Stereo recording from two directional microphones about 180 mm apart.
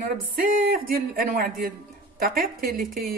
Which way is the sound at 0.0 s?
50° right (ahead or behind).